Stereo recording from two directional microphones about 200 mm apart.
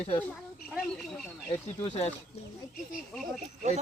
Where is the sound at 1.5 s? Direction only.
30° left (ahead or behind).